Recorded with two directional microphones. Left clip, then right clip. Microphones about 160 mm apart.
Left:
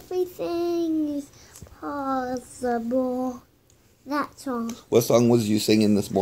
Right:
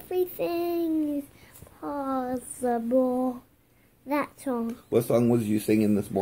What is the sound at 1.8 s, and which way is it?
Female singing, 20° right (ahead or behind).